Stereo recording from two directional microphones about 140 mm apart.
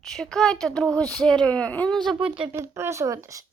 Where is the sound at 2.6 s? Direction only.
20° right (ahead or behind).